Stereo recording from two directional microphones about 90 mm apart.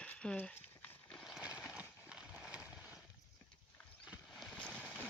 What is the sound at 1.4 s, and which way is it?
Horse, 10° right (ahead or behind).